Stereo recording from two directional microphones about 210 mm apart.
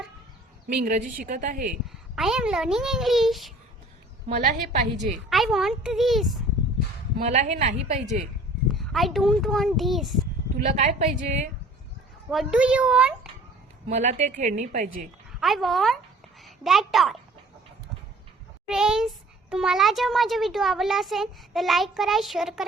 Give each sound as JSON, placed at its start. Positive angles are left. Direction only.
{"t": 0.7, "sound": "a woman's voice", "side_deg": -40}
{"t": 2.1, "sound": "a child's voice", "side_deg": 0}
{"t": 4.3, "sound": "a woman's voice", "side_deg": -35}
{"t": 5.3, "sound": "a child's voice", "side_deg": 0}
{"t": 7.2, "sound": "a woman's voice", "side_deg": -35}
{"t": 8.6, "sound": "a child's voice", "side_deg": 0}
{"t": 10.6, "sound": "a woman's voice", "side_deg": -35}
{"t": 12.3, "sound": "a child's voice", "side_deg": 0}
{"t": 13.8, "sound": "a woman's voice", "side_deg": -35}
{"t": 15.4, "sound": "a child's voice", "side_deg": 0}
{"t": 18.7, "sound": "a child's voice", "side_deg": -5}